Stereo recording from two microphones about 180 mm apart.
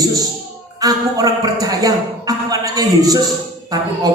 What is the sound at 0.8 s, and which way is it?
Speech, 20° right (ahead or behind).